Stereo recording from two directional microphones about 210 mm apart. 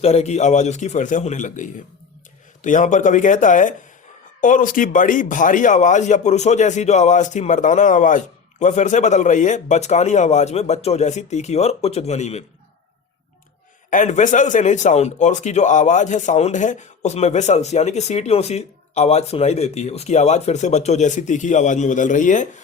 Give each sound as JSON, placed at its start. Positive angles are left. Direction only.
{"t": 0.0, "sound": "a man's voice", "side_deg": 30}
{"t": 13.9, "sound": "a man's voice", "side_deg": 35}